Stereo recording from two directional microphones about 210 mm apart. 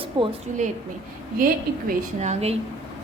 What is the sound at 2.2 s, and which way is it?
Speech, 30° right (ahead or behind).